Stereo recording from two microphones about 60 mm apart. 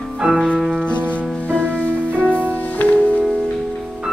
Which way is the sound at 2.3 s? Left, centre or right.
Left.